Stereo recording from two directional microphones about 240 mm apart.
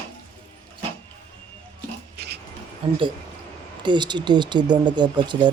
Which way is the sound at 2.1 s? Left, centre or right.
Right.